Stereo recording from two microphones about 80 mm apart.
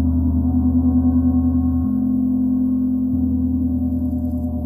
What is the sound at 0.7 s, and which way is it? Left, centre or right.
Gong, right.